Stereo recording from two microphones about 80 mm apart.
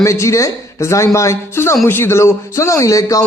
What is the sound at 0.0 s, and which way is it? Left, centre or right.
A man's voice, left.